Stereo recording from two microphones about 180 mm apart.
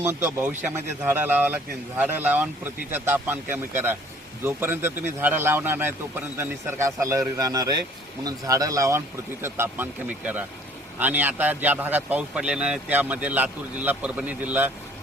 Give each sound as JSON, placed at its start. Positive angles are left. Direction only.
{"t": 0.0, "sound": "a man's voice", "side_deg": -15}